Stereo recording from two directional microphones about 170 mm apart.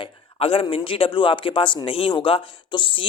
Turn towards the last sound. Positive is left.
turn(degrees=30)  # may be behind; listen again after turning